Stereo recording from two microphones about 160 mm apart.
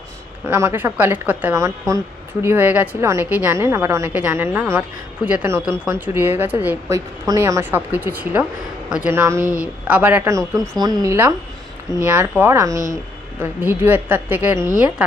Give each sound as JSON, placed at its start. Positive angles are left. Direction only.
{"t": 0.4, "sound": "a woman's voice", "side_deg": -15}